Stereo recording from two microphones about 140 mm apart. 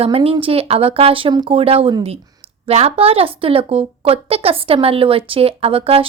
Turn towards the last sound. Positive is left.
turn(degrees=-45)  # may be behind; listen again after turning